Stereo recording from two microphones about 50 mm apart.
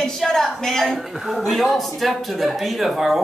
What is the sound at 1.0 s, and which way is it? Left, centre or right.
A man's voice, centre.